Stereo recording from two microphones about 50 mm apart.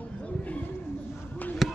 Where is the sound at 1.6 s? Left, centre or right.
Centre.